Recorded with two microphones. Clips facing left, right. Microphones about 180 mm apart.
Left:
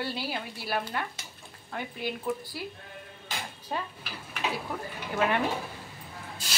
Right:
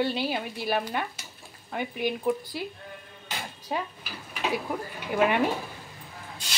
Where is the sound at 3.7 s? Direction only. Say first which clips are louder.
Right 3 dB; 10° right (ahead or behind).